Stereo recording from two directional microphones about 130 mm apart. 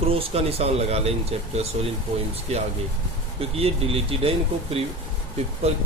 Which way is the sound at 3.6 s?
50° right (ahead or behind).